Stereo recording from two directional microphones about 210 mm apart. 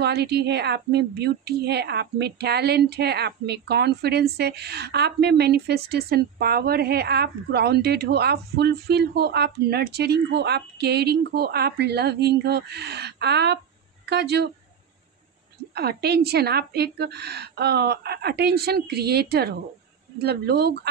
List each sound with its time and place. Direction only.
0.0 s a woman's voice: 50° right (ahead or behind)
15.7 s a woman's voice: 50° right (ahead or behind)